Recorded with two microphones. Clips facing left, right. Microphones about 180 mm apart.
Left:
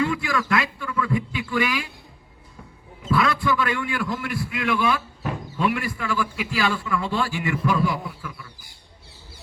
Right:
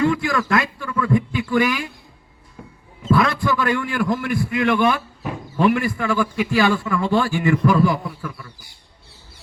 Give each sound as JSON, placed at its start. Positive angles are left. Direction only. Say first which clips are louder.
{"t": 0.0, "sound": "a man's voice", "louder": "right 4 dB", "side_deg": -45}
{"t": 3.1, "sound": "a man's voice", "louder": "right 3 dB", "side_deg": -45}